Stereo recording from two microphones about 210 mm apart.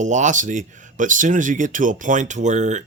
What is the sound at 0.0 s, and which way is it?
Speech, 35° right (ahead or behind).